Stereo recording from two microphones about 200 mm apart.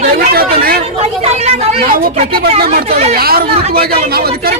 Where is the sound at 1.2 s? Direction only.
30° right (ahead or behind).